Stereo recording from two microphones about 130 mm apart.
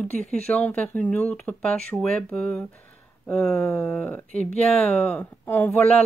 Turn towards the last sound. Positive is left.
turn(degrees=10)  # may be behind; listen again after turning